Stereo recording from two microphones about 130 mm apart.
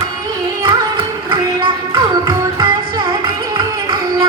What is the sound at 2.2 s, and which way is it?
Music, 30° right (ahead or behind).